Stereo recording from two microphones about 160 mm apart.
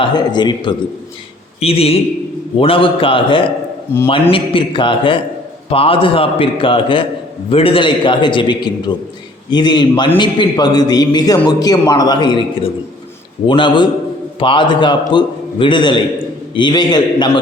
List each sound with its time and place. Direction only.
0.0 s a man's voice: 25° left (ahead or behind)
13.5 s a man's voice: 30° left (ahead or behind)